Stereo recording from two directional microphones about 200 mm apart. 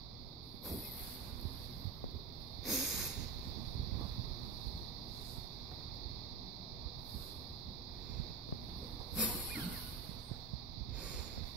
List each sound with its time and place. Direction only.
2.6 s snort: centre (ahead or behind)
9.1 s vehicle: 5° right (ahead or behind)